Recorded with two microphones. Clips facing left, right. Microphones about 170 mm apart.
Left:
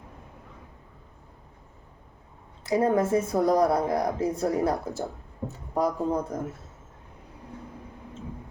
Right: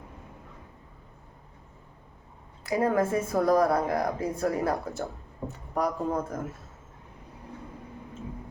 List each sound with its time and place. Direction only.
2.6 s speech: 25° left (ahead or behind)